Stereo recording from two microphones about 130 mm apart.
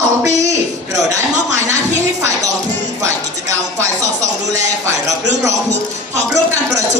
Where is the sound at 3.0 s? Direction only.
20° right (ahead or behind).